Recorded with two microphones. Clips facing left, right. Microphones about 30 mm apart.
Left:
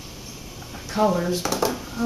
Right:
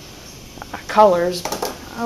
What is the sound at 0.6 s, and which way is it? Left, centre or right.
Speech, right.